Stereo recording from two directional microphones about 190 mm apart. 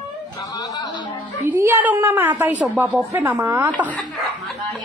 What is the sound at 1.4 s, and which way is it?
A woman's voice, 10° right (ahead or behind).